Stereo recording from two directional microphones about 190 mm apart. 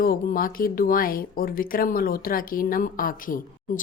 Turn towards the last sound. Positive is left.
turn(degrees=45)  # may be behind; listen again after turning